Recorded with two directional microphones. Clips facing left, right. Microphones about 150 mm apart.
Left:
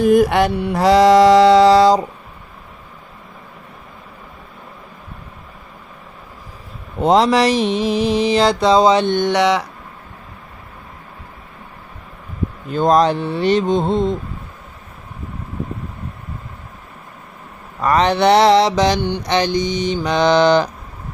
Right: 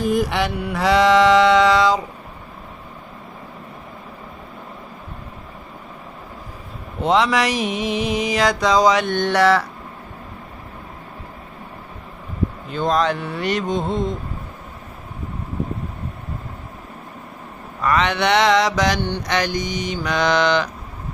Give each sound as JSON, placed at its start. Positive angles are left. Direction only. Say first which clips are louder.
{"t": 0.0, "sound": "mantra", "louder": "left 7 dB", "side_deg": 60}
{"t": 0.6, "sound": "mantra", "louder": "left 3 dB", "side_deg": 35}
{"t": 7.0, "sound": "mantra", "louder": "left 4 dB", "side_deg": 40}
{"t": 9.1, "sound": "speech", "louder": "left 1 dB", "side_deg": 15}
{"t": 12.7, "sound": "mantra", "louder": "left 6 dB", "side_deg": 40}
{"t": 17.8, "sound": "mantra", "louder": "left 5 dB", "side_deg": 35}